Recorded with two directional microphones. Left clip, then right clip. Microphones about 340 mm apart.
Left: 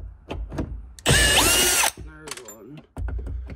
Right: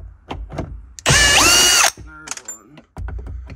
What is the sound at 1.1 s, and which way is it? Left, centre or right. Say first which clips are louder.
Ratchet: right 7 dB; centre.